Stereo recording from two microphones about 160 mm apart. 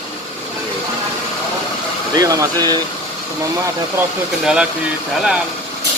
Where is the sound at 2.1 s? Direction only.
20° right (ahead or behind).